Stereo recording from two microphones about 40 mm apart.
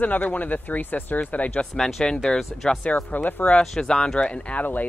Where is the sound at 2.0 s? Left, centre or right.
Left.